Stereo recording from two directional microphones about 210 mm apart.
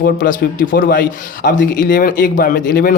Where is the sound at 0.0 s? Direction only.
40° left (ahead or behind).